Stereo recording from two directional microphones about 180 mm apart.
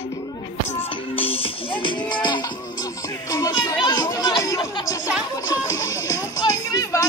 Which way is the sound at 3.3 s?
20° left (ahead or behind).